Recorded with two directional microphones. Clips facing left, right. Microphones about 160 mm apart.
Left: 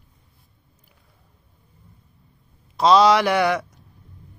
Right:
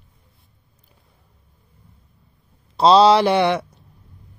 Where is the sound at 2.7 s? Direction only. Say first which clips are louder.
Right 3 dB; 30° right (ahead or behind).